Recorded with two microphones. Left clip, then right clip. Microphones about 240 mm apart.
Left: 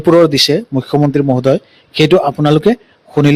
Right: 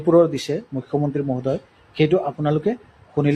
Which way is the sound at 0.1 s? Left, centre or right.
Left.